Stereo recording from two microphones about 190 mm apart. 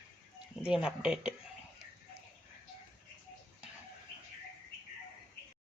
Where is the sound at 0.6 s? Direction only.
5° right (ahead or behind).